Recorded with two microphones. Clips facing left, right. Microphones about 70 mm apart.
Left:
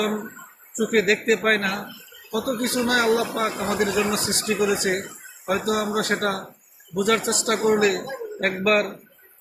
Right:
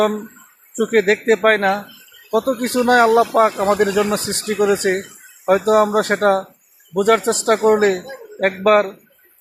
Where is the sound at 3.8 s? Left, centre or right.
Right.